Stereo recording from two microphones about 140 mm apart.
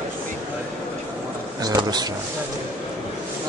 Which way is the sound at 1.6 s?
30° right (ahead or behind).